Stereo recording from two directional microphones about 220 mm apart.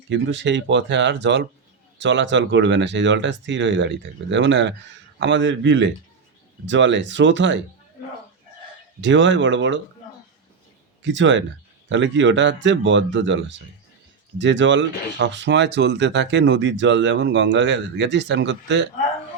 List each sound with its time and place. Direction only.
0.1 s speech: 55° right (ahead or behind)
9.0 s speech: 55° right (ahead or behind)
11.0 s speech: 55° right (ahead or behind)